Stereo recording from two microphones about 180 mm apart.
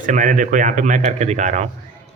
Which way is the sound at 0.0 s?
45° right (ahead or behind).